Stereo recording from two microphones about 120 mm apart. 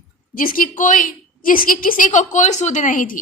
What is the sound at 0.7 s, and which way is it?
A woman's voice, 90° left.